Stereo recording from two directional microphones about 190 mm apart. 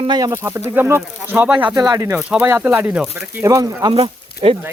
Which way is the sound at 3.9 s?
30° right (ahead or behind).